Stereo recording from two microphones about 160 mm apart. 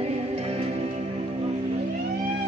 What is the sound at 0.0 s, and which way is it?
Music, 40° right (ahead or behind).